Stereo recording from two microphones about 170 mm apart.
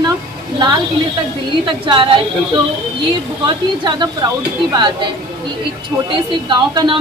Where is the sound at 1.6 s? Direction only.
30° right (ahead or behind).